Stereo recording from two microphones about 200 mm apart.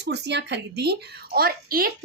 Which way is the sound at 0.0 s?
60° right (ahead or behind).